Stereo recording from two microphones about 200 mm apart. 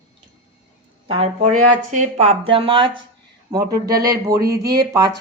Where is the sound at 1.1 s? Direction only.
30° right (ahead or behind).